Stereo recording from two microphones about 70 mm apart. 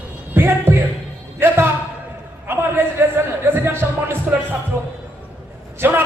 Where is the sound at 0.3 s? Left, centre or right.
Right.